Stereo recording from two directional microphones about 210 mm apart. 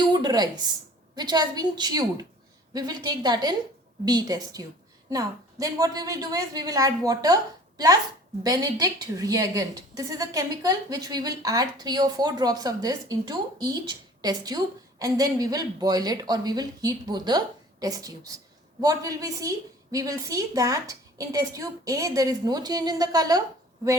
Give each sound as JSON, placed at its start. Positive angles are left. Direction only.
{"t": 0.1, "sound": "a woman's voice", "side_deg": -20}
{"t": 8.4, "sound": "a woman's voice", "side_deg": -20}